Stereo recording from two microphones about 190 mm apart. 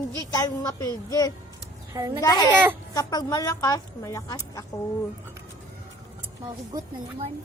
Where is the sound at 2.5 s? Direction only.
10° right (ahead or behind).